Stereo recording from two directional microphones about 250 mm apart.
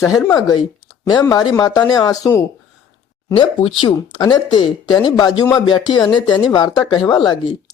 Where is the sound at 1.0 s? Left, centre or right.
Centre.